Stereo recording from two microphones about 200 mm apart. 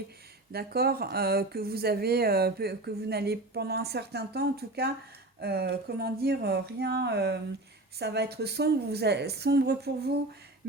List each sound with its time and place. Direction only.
0.5 s a woman's voice: 50° right (ahead or behind)